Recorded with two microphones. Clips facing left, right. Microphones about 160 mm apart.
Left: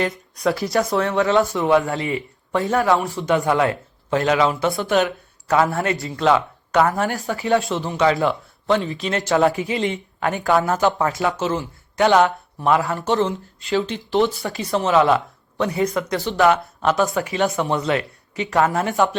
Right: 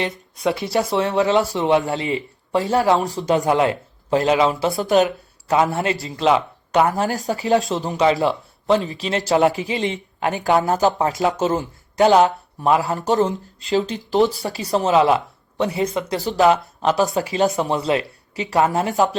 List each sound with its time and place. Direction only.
0.1 s speech: centre (ahead or behind)
0.9 s a man's voice: 25° right (ahead or behind)
3.4 s speech: 25° right (ahead or behind)
4.6 s speech: 40° right (ahead or behind)
5.0 s a sound: 20° right (ahead or behind)
5.7 s a man's voice: 25° right (ahead or behind)
7.1 s speech: 35° right (ahead or behind)
8.0 s a man's voice: 20° right (ahead or behind)
8.7 s a man's voice: 35° right (ahead or behind)
10.9 s a man's voice: 20° right (ahead or behind)
11.3 s a man's voice: 40° right (ahead or behind); by 18.9 s 20° right (ahead or behind)